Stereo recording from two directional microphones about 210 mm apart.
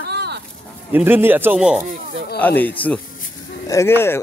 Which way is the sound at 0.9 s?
10° right (ahead or behind).